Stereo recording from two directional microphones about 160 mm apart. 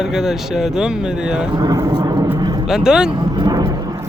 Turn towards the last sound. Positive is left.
turn(degrees=-20)  # may be behind; listen again after turning